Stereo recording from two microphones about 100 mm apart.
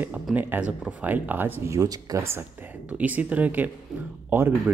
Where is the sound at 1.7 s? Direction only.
40° right (ahead or behind).